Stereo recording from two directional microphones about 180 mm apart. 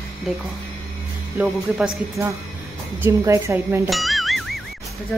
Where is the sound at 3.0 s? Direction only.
15° right (ahead or behind).